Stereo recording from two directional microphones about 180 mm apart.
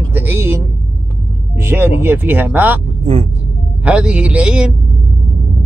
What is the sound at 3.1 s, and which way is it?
Speech, 35° right (ahead or behind).